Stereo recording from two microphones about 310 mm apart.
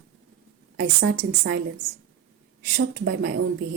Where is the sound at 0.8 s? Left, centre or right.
Right.